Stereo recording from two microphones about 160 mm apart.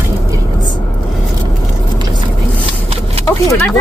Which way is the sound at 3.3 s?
15° left (ahead or behind).